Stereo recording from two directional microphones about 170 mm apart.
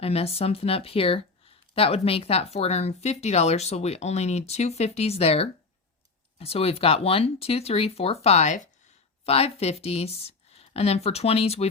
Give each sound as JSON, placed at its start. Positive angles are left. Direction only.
{"t": 0.0, "sound": "speech", "side_deg": 35}
{"t": 9.2, "sound": "speech", "side_deg": 35}